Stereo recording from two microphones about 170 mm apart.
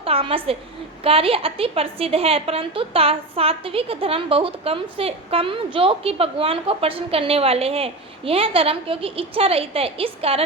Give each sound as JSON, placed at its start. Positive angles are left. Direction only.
{"t": 0.0, "sound": "a woman's voice", "side_deg": -35}